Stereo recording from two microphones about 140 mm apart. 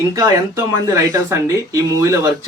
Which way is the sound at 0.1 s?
25° right (ahead or behind).